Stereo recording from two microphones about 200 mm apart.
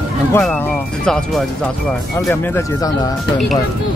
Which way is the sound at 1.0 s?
5° left (ahead or behind).